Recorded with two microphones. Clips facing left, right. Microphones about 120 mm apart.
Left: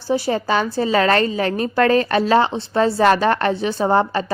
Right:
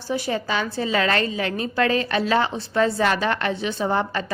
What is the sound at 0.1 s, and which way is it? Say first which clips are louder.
A woman's voice: left 6 dB; 35° left (ahead or behind).